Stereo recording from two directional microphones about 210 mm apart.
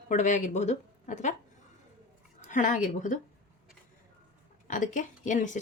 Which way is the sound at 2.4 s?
35° left (ahead or behind).